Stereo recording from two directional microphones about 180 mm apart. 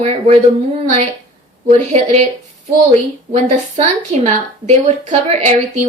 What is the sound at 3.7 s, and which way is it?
A woman's voice, 35° right (ahead or behind).